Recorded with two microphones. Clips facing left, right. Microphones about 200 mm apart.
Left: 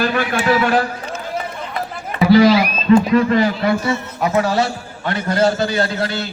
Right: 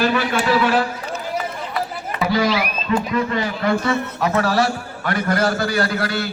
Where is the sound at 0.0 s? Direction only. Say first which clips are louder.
Left 1 dB; 45° left (ahead or behind).